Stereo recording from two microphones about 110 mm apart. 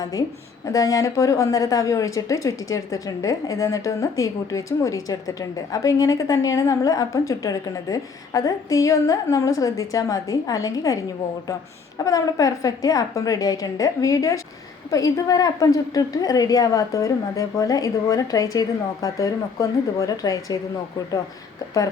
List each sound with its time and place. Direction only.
0.0 s a woman's voice: 35° left (ahead or behind)
12.0 s a woman's voice: 30° left (ahead or behind)